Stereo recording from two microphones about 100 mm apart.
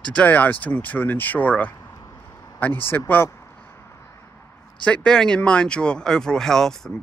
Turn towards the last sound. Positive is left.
turn(degrees=5)  # may be behind; listen again after turning